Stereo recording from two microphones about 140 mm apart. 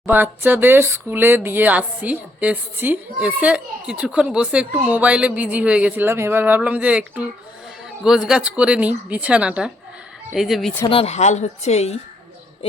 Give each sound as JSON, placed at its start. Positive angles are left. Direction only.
{"t": 0.0, "sound": "speech", "side_deg": -15}
{"t": 8.0, "sound": "speech", "side_deg": -5}
{"t": 10.8, "sound": "speech", "side_deg": 45}